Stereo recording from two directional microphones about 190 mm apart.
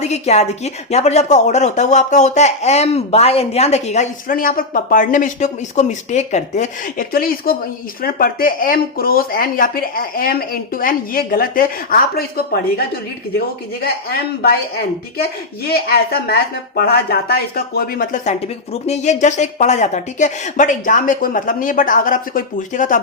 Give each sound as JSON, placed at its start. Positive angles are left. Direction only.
{"t": 0.0, "sound": "speech", "side_deg": 35}
{"t": 15.6, "sound": "speech", "side_deg": 55}